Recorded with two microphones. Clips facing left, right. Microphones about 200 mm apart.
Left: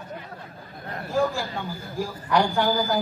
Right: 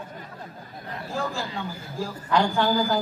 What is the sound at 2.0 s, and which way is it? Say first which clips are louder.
Speech: left 1 dB; 15° left (ahead or behind).